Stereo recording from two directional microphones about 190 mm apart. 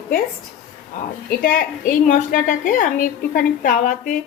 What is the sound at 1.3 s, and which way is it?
A woman's voice, 45° left (ahead or behind).